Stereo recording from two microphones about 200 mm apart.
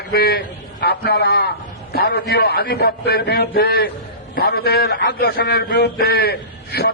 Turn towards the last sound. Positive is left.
turn(degrees=55)  # may be behind; listen again after turning